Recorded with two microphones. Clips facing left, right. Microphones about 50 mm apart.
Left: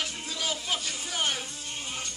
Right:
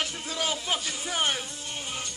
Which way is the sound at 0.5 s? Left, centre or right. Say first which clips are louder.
Right 2 dB; right.